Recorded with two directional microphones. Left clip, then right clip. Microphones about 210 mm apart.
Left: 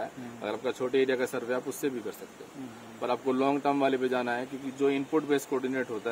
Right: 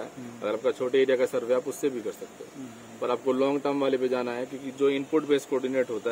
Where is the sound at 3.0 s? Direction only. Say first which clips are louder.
Right 2 dB; 15° left (ahead or behind).